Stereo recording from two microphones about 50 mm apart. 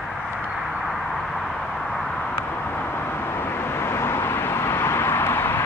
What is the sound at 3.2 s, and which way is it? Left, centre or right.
Vehicle, left.